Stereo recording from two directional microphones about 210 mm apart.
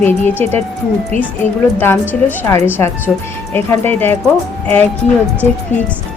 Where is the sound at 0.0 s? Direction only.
10° left (ahead or behind).